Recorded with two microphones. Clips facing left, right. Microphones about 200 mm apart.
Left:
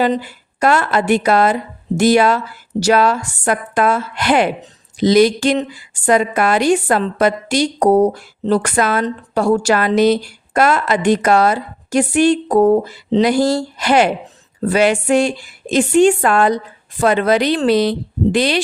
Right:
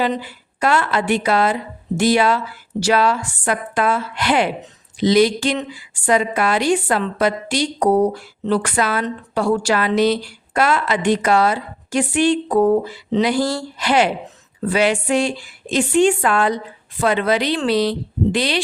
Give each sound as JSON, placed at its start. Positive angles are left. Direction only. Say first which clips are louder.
{"t": 0.0, "sound": "a woman's voice", "louder": "left 4 dB", "side_deg": 45}